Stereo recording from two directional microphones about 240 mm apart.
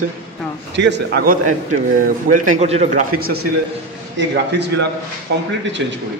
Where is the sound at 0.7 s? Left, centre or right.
Right.